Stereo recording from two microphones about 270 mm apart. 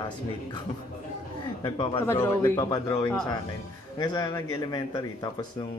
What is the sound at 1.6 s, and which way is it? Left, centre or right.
Speech, centre.